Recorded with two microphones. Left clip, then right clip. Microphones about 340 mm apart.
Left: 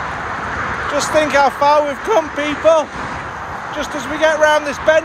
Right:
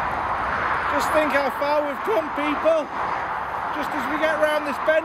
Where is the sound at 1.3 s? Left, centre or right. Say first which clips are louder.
Left 9 dB; centre.